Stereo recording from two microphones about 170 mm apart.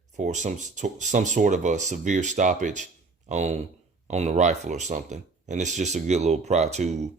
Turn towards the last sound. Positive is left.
turn(degrees=-40)  # may be behind; listen again after turning